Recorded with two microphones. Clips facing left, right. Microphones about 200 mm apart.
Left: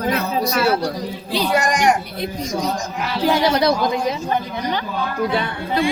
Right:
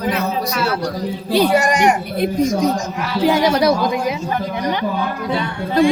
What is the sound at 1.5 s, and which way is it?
Speech, 5° right (ahead or behind).